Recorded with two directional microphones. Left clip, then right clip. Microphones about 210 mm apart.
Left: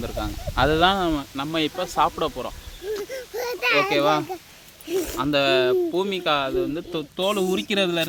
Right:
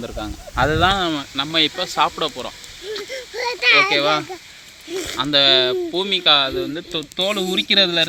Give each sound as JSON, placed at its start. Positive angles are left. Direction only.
{"t": 0.0, "sound": "speech", "side_deg": -5}
{"t": 3.3, "sound": "children playing", "side_deg": 40}
{"t": 3.8, "sound": "a child's voice", "side_deg": 15}
{"t": 5.1, "sound": "speech", "side_deg": 5}